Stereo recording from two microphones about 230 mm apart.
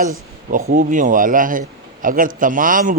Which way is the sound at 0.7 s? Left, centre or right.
Right.